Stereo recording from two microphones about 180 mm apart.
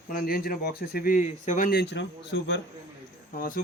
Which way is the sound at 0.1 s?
55° left (ahead or behind).